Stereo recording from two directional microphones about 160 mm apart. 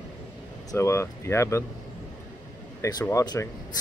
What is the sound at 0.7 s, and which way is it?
Speech, 20° left (ahead or behind).